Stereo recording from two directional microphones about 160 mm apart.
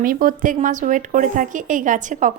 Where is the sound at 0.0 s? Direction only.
60° right (ahead or behind).